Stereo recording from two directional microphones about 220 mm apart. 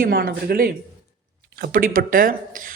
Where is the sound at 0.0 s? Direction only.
45° right (ahead or behind).